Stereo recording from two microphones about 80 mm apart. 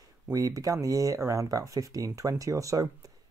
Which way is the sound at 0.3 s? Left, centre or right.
Right.